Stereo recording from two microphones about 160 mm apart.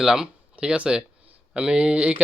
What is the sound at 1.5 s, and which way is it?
Speech, 5° right (ahead or behind).